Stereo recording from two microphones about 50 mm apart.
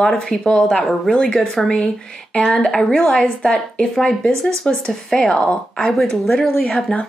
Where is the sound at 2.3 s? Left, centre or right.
Left.